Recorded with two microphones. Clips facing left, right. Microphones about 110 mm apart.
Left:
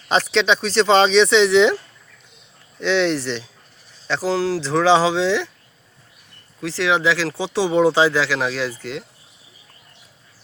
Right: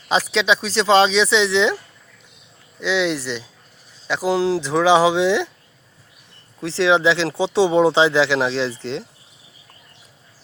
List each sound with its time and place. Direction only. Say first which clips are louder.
0.1 s speech: left 1 dB; 5° right (ahead or behind)
2.8 s speech: left 2 dB; 5° right (ahead or behind)
6.6 s speech: right 3 dB; 25° right (ahead or behind)